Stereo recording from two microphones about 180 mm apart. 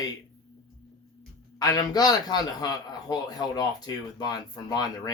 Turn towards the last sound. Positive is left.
turn(degrees=20)  # may be behind; listen again after turning